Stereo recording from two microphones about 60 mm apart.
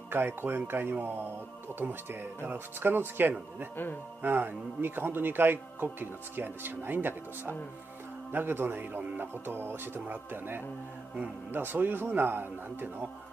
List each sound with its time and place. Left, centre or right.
0.1 s speech: right
3.7 s a man's voice: left
4.2 s speech: right